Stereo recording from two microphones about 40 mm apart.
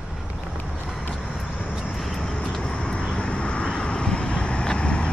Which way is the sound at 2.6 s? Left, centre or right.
Left.